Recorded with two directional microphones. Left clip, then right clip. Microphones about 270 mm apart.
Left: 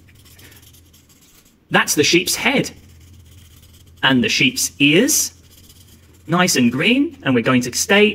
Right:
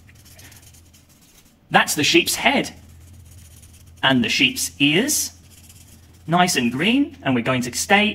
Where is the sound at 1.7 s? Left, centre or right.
Centre.